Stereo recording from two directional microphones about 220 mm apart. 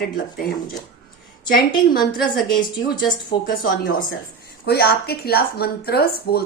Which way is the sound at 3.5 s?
40° left (ahead or behind).